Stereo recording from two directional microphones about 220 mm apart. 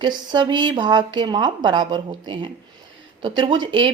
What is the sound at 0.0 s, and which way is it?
Speech, 20° right (ahead or behind).